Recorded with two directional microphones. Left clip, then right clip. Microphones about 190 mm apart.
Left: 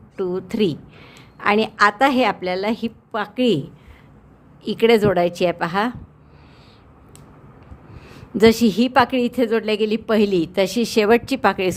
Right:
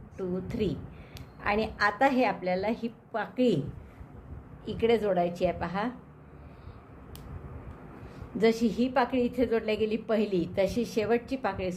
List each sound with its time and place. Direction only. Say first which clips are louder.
0.2 s a woman's voice: left 11 dB; 45° left (ahead or behind)
4.6 s a woman's voice: left 11 dB; 40° left (ahead or behind)
8.4 s a woman's voice: left 11 dB; 45° left (ahead or behind)